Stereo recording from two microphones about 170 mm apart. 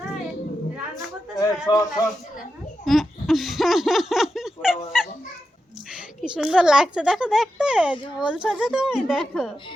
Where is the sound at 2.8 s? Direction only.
Centre (ahead or behind).